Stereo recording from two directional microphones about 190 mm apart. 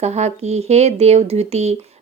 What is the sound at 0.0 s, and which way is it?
Speech, 35° right (ahead or behind).